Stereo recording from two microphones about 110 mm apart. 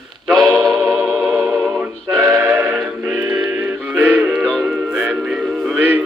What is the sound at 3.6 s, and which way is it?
Music, 15° right (ahead or behind).